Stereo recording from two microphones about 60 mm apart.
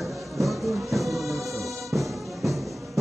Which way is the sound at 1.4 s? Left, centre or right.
Right.